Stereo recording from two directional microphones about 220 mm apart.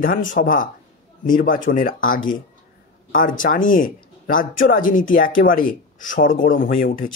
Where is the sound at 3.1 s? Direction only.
40° left (ahead or behind).